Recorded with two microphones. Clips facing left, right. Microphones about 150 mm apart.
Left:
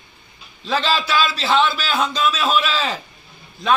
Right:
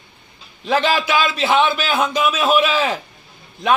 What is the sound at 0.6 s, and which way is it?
A man's voice, 15° right (ahead or behind).